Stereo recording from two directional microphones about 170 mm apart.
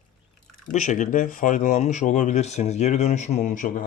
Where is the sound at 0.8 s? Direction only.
45° left (ahead or behind).